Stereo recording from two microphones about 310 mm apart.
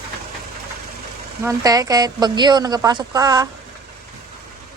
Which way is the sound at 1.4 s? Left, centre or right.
Centre.